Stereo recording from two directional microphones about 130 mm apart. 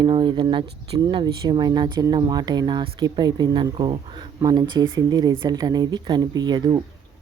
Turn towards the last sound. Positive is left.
turn(degrees=-35)  # may be behind; listen again after turning